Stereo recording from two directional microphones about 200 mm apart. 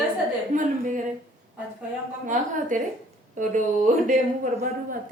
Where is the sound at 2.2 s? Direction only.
40° right (ahead or behind).